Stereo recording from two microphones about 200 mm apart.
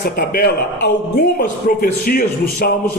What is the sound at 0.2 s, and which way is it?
A man's voice, 50° left (ahead or behind).